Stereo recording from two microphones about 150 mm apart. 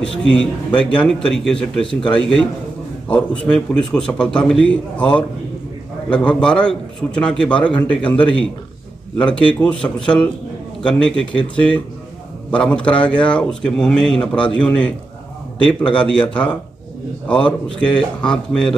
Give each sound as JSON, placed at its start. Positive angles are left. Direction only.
{"t": 0.2, "sound": "a man's voice", "side_deg": 5}